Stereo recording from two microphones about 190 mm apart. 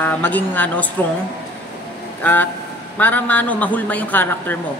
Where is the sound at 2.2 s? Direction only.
10° left (ahead or behind).